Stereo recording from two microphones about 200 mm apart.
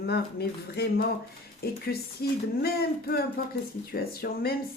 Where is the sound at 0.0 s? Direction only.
55° left (ahead or behind).